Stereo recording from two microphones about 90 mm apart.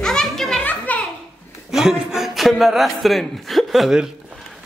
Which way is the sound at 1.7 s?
5° right (ahead or behind).